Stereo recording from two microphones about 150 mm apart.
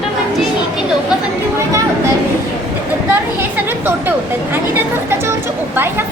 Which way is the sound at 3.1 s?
15° right (ahead or behind).